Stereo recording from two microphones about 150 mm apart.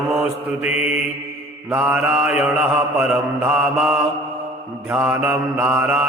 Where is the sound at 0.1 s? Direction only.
5° right (ahead or behind).